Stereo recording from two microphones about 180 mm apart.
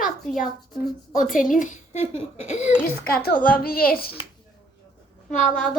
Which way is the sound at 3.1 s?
60° left (ahead or behind).